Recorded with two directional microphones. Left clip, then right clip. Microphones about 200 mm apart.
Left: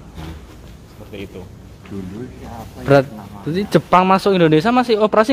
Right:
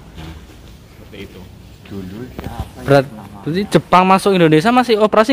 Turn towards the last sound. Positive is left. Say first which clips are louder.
# right 2 dB
turn(degrees=-10)  # may be behind; listen again after turning